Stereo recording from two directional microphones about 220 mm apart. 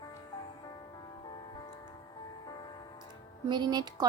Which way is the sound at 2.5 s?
20° left (ahead or behind).